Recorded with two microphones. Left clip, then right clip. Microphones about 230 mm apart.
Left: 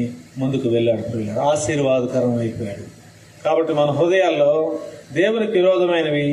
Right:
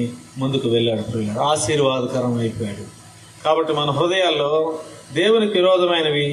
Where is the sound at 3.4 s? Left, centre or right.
Right.